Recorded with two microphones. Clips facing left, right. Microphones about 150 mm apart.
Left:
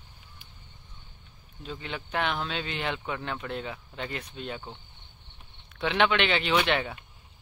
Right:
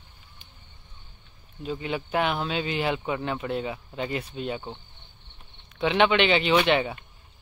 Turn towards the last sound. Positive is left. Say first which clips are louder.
# right 4 dB
turn(degrees=-5)  # may be behind; listen again after turning